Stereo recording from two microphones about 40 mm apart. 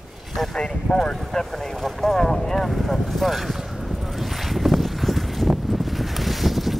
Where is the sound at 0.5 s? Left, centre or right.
Centre.